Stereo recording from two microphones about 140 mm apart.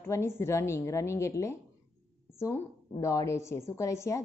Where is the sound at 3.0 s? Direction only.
20° left (ahead or behind).